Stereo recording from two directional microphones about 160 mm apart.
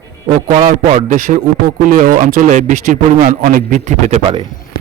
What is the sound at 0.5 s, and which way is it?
A man's voice, 55° right (ahead or behind).